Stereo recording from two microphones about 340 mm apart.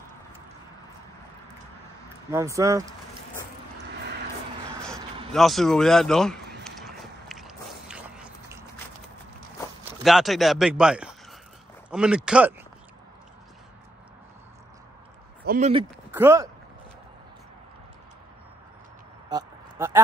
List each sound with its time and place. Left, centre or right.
2.3 s speech: centre
4.0 s vehicle: right
5.3 s speech: centre
6.6 s biting: centre
10.0 s speech: centre
15.4 s speech: right
16.1 s speech: centre
19.2 s a sound: centre